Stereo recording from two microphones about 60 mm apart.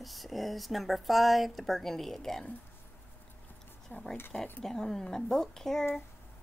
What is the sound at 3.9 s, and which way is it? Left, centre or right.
Speech, left.